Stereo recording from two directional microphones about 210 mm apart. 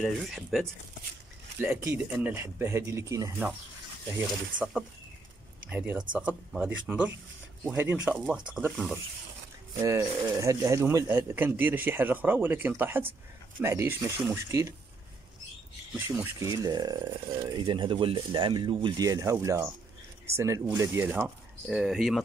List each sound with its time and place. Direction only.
0.0 s speech: centre (ahead or behind)
1.8 s speech: 15° right (ahead or behind)
4.6 s speech: 5° right (ahead or behind)
16.1 s speech: 15° right (ahead or behind)